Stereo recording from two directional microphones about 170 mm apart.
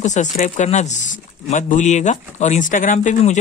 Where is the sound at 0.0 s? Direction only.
45° left (ahead or behind).